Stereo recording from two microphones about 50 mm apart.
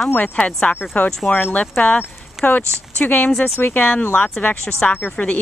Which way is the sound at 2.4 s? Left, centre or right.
Centre.